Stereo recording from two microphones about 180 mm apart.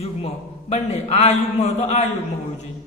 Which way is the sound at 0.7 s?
35° left (ahead or behind).